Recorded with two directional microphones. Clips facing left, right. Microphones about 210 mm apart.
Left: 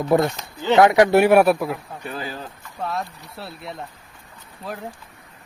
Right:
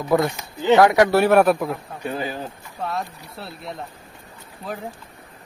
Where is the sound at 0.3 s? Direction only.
15° right (ahead or behind).